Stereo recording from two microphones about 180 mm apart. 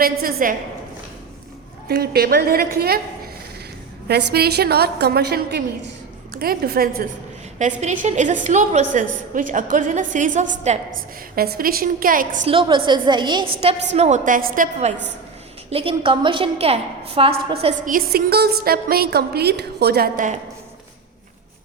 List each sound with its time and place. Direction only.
0.0 s a woman's voice: 55° right (ahead or behind)
1.9 s a woman's voice: 55° right (ahead or behind)
4.1 s a woman's voice: 65° right (ahead or behind)
7.6 s a woman's voice: 40° right (ahead or behind)
11.3 s a woman's voice: 55° right (ahead or behind)
12.5 s a woman's voice: 30° right (ahead or behind)
13.9 s a woman's voice: 40° right (ahead or behind)
15.7 s a woman's voice: 30° right (ahead or behind)
17.8 s a woman's voice: 55° right (ahead or behind)